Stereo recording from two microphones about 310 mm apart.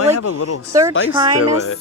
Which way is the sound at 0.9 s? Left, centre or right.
Left.